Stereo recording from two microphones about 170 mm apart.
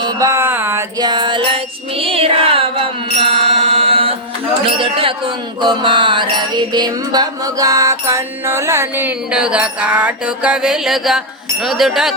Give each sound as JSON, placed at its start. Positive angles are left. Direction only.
{"t": 0.0, "sound": "music", "side_deg": -20}
{"t": 3.2, "sound": "mantra", "side_deg": -35}
{"t": 4.8, "sound": "music", "side_deg": -30}
{"t": 11.6, "sound": "speech", "side_deg": 0}